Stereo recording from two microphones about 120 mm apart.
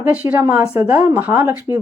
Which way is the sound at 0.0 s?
15° right (ahead or behind).